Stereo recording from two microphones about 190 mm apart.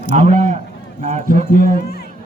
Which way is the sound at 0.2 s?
40° right (ahead or behind).